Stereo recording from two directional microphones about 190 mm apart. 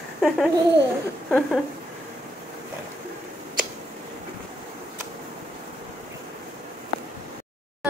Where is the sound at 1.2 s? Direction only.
5° left (ahead or behind).